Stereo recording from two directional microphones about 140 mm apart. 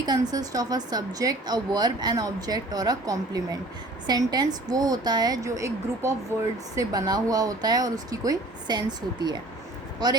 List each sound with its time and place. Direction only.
0.0 s a woman's voice: 30° right (ahead or behind)